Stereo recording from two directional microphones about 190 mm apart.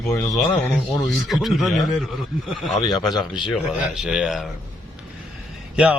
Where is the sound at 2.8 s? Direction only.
25° left (ahead or behind).